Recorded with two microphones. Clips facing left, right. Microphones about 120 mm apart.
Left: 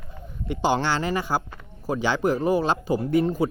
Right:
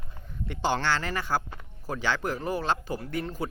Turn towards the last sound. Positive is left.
turn(degrees=15)  # may be behind; listen again after turning